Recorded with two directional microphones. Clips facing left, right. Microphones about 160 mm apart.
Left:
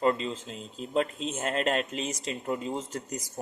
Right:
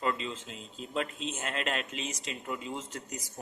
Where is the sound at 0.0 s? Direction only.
35° left (ahead or behind).